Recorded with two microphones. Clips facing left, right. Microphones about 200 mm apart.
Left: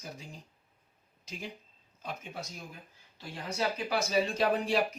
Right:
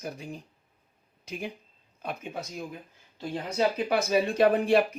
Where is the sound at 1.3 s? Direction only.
60° right (ahead or behind).